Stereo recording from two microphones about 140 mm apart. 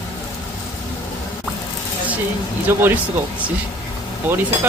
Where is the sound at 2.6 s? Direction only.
10° right (ahead or behind).